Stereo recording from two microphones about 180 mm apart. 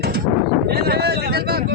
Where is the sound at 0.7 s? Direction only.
65° right (ahead or behind).